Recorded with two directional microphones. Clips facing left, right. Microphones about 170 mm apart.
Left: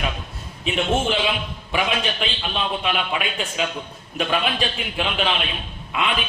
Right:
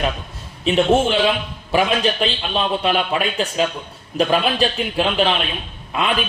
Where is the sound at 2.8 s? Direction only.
40° right (ahead or behind).